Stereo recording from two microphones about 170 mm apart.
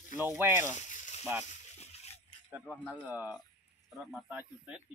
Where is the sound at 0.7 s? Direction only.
45° left (ahead or behind).